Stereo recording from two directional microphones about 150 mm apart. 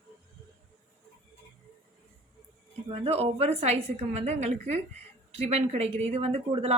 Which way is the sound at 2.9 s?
45° right (ahead or behind).